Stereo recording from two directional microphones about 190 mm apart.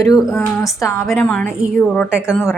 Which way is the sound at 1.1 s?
5° left (ahead or behind).